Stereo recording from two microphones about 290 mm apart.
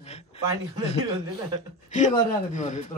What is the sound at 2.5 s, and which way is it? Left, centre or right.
Speech, left.